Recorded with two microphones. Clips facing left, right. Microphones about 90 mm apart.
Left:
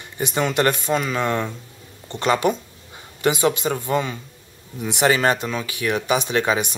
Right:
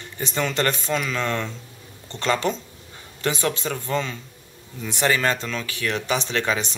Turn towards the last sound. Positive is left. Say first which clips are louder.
# left 4 dB
turn(degrees=15)  # may be behind; listen again after turning